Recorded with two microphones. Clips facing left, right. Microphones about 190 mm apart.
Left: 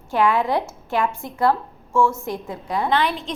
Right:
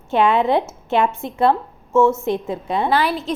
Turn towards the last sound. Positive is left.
turn(degrees=-5)  # may be behind; listen again after turning